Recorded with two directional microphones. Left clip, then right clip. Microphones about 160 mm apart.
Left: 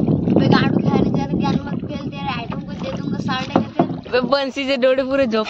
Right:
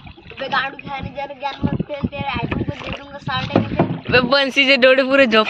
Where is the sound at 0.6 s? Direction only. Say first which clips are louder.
Left 4 dB; 30° left (ahead or behind).